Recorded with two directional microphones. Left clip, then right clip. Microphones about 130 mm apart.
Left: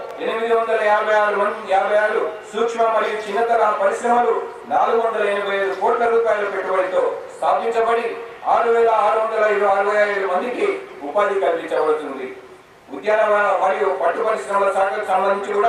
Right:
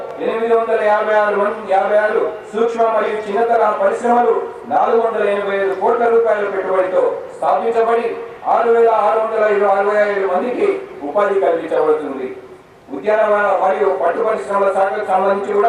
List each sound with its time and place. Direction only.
0.2 s a man's voice: 15° right (ahead or behind)
4.2 s a man's voice: 25° right (ahead or behind)
4.8 s a man's voice: 15° right (ahead or behind)
13.1 s a man's voice: 15° right (ahead or behind)